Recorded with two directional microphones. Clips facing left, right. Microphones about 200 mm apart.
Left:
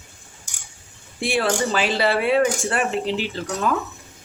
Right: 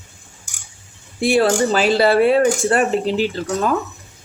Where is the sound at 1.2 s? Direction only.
40° right (ahead or behind).